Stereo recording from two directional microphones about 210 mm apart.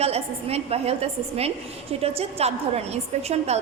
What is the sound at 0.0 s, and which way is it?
A woman's voice, 30° right (ahead or behind).